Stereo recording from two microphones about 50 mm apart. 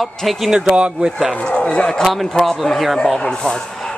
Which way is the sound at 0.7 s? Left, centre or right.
Right.